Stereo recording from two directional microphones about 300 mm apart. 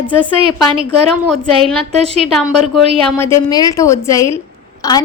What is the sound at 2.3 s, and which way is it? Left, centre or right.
A woman's voice, centre.